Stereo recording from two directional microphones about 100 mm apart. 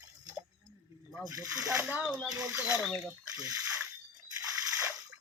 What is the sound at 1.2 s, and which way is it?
Speech, 35° right (ahead or behind).